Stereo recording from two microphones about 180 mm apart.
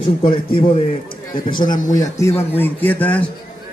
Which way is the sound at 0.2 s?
30° left (ahead or behind).